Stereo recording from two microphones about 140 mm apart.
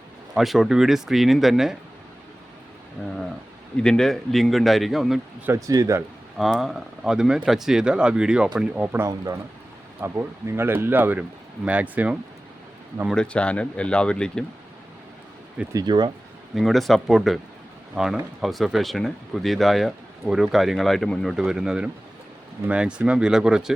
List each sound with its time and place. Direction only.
0.3 s speech: centre (ahead or behind)
3.8 s speech: 5° left (ahead or behind)
5.5 s speech: 25° right (ahead or behind)
6.3 s speech: centre (ahead or behind)
13.1 s speech: 5° left (ahead or behind)
15.7 s speech: 30° right (ahead or behind)
16.6 s speech: centre (ahead or behind)